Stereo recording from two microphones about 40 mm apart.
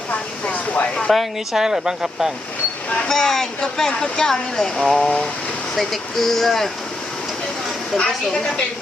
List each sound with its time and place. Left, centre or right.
0.1 s vehicle: left
1.1 s speech: centre
1.5 s speech: centre
3.1 s speech: centre
8.3 s speech: centre